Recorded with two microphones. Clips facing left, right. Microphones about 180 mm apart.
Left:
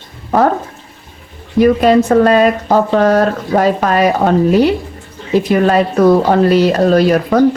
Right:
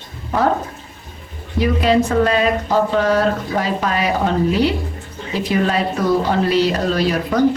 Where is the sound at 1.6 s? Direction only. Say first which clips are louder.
Left 7 dB; 45° left (ahead or behind).